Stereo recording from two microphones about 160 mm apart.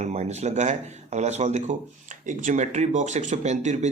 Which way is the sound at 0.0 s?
45° right (ahead or behind).